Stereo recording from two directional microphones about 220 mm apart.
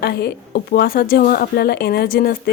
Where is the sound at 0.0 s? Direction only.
45° left (ahead or behind).